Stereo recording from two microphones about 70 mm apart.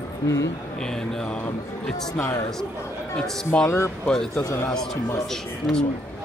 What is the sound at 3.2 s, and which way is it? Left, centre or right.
Speech, centre.